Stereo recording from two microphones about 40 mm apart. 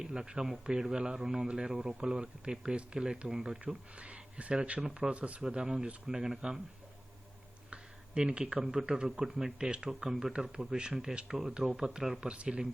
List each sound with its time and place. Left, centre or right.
0.0 s speech: centre
3.6 s speech: right
5.4 s speech: centre
7.7 s a sound: right
8.5 s speech: centre
12.2 s speech: right